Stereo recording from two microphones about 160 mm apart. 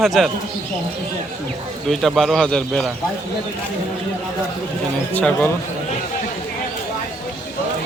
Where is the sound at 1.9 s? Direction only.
Centre (ahead or behind).